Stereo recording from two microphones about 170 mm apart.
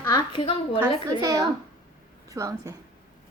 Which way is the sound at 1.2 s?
20° right (ahead or behind).